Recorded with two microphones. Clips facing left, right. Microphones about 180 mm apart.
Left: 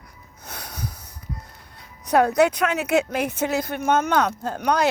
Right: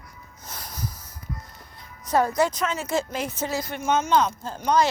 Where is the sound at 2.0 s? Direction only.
65° left (ahead or behind).